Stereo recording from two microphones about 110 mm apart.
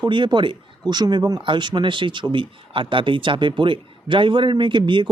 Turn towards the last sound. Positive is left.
turn(degrees=-45)  # may be behind; listen again after turning